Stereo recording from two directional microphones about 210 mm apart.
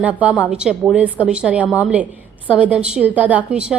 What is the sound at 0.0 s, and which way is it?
A woman's voice, 5° right (ahead or behind).